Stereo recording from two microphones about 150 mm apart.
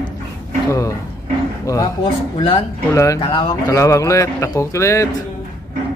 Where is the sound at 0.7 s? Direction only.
20° left (ahead or behind).